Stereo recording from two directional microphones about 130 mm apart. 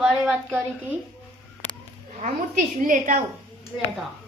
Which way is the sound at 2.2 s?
85° right.